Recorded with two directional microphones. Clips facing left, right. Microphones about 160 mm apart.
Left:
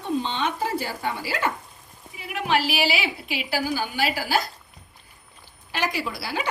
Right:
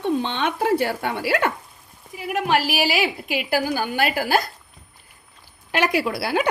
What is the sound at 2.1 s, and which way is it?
A woman's voice, 45° right (ahead or behind).